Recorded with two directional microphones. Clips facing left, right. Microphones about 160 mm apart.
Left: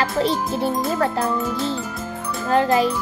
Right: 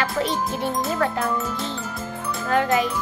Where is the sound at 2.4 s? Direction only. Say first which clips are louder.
Left 3 dB; 30° left (ahead or behind).